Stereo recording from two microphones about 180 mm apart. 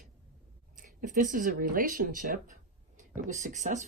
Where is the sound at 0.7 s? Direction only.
45° right (ahead or behind).